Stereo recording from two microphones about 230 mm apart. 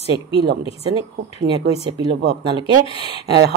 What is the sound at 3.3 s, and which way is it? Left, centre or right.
Speech, right.